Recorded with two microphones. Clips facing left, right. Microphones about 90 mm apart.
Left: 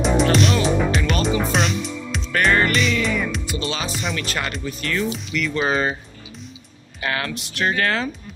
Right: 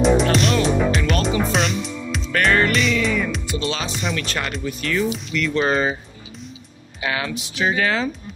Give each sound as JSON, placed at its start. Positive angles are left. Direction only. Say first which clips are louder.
{"t": 0.0, "sound": "music", "louder": "right 1 dB", "side_deg": 0}
{"t": 7.0, "sound": "speech", "louder": "right 1 dB", "side_deg": 0}